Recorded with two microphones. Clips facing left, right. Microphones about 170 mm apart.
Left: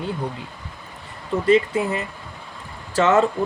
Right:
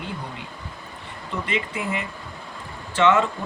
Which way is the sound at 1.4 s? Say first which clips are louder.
Left 12 dB; 40° left (ahead or behind).